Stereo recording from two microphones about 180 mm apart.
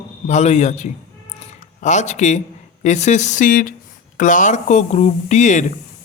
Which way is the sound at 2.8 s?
40° left (ahead or behind).